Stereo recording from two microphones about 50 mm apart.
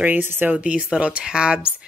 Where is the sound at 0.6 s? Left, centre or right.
Right.